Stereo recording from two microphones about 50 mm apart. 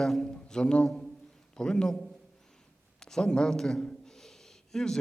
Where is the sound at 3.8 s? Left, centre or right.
Centre.